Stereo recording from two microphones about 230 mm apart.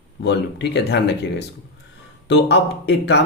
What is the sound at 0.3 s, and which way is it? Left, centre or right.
Speech, left.